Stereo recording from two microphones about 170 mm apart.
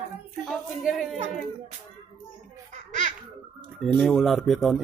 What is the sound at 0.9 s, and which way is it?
Speech, centre (ahead or behind).